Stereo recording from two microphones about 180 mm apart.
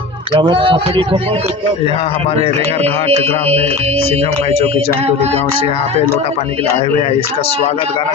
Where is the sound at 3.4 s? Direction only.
35° right (ahead or behind).